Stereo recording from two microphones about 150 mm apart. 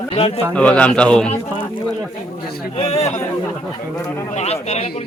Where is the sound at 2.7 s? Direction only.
40° left (ahead or behind).